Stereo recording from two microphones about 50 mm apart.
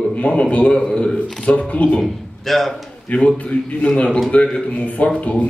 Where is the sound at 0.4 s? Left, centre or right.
Left.